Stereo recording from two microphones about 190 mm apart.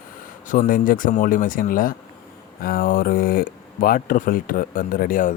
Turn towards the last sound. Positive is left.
turn(degrees=45)  # may be behind; listen again after turning